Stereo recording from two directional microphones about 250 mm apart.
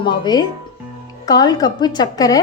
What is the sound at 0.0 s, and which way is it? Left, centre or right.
Speech, centre.